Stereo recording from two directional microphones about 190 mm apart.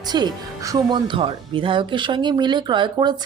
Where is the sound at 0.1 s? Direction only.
20° right (ahead or behind).